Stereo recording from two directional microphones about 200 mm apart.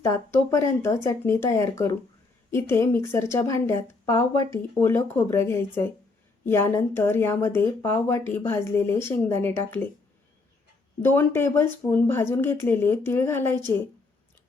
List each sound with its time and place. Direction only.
0.0 s speech: 15° left (ahead or behind)
11.0 s speech: 10° left (ahead or behind)